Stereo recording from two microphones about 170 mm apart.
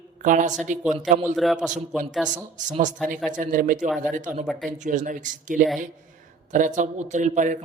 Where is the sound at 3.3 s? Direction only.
50° right (ahead or behind).